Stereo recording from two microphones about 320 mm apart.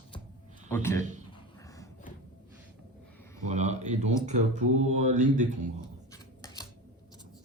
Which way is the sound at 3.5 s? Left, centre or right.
Right.